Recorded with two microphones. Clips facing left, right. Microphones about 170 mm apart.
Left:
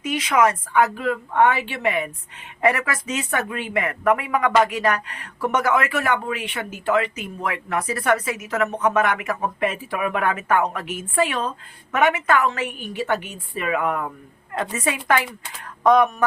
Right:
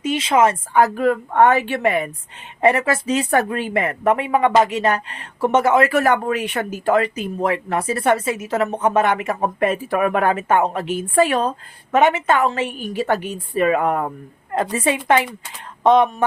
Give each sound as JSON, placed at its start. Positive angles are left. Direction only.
{"t": 0.0, "sound": "a woman's voice", "side_deg": -25}
{"t": 0.9, "sound": "a woman's voice", "side_deg": -45}
{"t": 2.6, "sound": "speech", "side_deg": -25}
{"t": 5.9, "sound": "a woman's voice", "side_deg": -40}
{"t": 9.6, "sound": "a woman's voice", "side_deg": -45}